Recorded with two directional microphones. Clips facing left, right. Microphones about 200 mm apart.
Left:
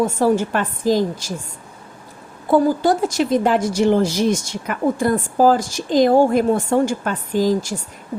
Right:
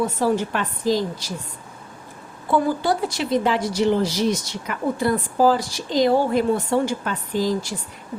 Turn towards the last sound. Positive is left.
turn(degrees=45)  # may be behind; listen again after turning